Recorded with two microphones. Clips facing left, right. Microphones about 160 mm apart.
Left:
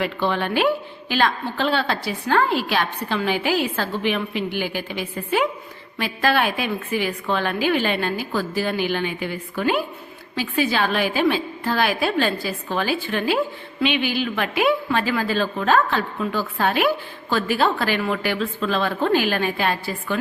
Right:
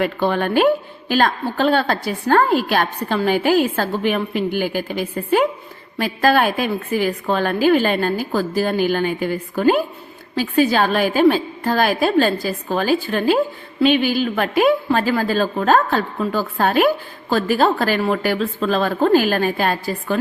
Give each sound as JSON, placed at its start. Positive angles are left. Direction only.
{"t": 0.0, "sound": "a woman's voice", "side_deg": -45}